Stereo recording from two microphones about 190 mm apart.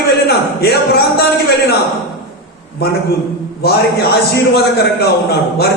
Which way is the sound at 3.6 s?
60° left (ahead or behind).